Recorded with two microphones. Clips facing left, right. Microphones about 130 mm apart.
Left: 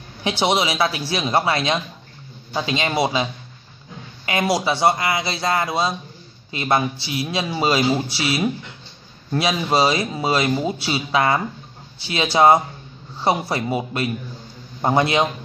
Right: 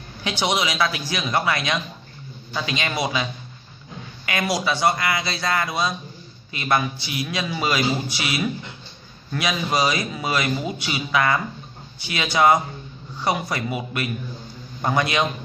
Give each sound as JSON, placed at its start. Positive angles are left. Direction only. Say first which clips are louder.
{"t": 0.2, "sound": "speech", "louder": "left 4 dB", "side_deg": 25}
{"t": 4.3, "sound": "speech", "louder": "left 3 dB", "side_deg": 25}